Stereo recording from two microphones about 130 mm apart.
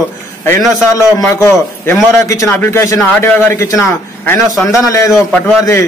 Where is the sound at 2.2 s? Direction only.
25° left (ahead or behind).